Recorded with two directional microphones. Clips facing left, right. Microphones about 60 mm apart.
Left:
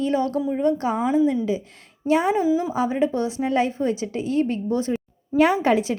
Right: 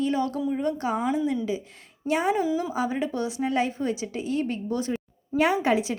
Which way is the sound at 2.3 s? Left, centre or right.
Left.